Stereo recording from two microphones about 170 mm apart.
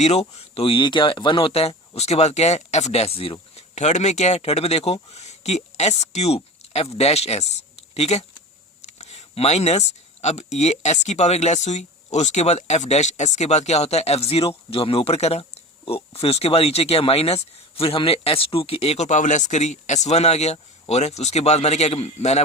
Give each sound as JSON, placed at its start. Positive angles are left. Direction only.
{"t": 0.0, "sound": "speech", "side_deg": 40}